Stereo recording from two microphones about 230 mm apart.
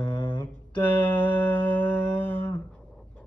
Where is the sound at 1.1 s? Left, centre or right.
Centre.